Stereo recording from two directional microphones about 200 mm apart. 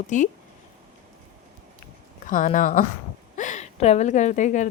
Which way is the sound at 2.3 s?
40° left (ahead or behind).